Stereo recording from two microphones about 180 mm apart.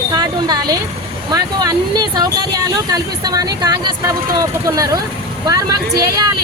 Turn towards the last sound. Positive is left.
turn(degrees=-20)  # may be behind; listen again after turning